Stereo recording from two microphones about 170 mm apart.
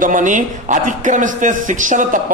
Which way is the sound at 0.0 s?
50° right (ahead or behind).